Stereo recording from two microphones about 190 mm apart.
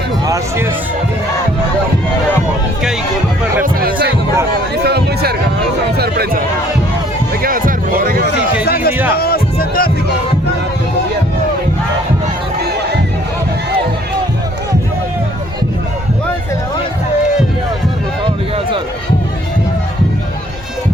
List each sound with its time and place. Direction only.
0.3 s speech: 15° right (ahead or behind)
3.6 s a man's voice: 50° right (ahead or behind)
4.9 s a sound: 60° right (ahead or behind)
7.4 s music: 45° right (ahead or behind)
8.6 s a sound: 55° left (ahead or behind)
9.1 s music: 55° left (ahead or behind)